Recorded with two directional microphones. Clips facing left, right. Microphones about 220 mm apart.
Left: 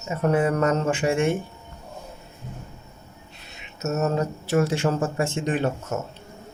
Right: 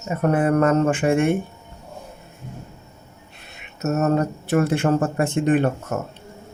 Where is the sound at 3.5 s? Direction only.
55° right (ahead or behind).